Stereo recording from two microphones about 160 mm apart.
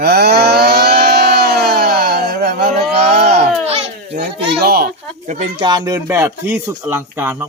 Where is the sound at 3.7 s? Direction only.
40° right (ahead or behind).